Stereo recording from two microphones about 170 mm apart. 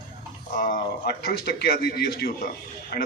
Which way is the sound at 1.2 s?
65° left (ahead or behind).